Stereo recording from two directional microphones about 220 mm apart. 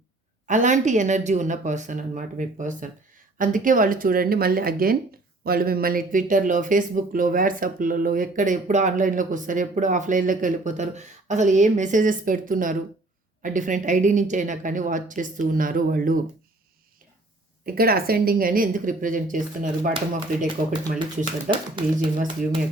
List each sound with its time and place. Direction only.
0.4 s speech: 35° right (ahead or behind)
17.7 s speech: 45° right (ahead or behind)
21.5 s speech: 20° right (ahead or behind)